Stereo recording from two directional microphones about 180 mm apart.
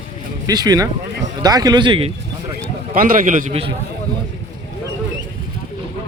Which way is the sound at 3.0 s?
50° right (ahead or behind).